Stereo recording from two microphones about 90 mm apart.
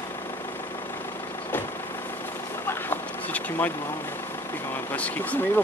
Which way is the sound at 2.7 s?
20° left (ahead or behind).